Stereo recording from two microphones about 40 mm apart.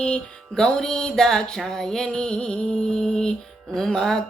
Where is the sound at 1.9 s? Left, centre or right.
Centre.